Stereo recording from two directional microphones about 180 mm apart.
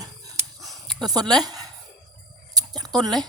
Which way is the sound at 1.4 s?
20° right (ahead or behind).